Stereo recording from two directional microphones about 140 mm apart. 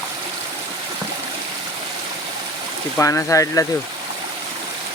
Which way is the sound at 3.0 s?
20° left (ahead or behind).